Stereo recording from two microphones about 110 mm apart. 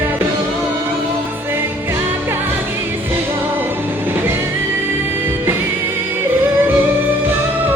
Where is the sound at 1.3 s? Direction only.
20° right (ahead or behind).